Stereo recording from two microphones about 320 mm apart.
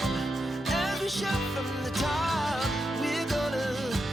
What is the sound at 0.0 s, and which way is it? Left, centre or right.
Music, centre.